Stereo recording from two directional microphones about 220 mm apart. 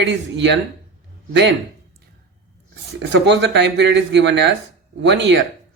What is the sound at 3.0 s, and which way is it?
Speech, 50° right (ahead or behind).